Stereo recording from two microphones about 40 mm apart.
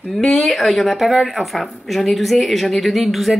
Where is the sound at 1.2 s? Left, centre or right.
Centre.